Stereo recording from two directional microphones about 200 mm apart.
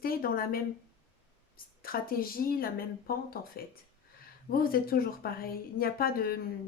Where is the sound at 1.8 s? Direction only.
45° left (ahead or behind).